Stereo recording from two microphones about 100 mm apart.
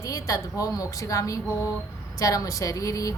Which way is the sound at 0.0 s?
35° left (ahead or behind).